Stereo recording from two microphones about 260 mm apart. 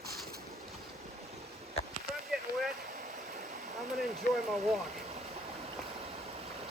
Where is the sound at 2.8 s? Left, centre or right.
Right.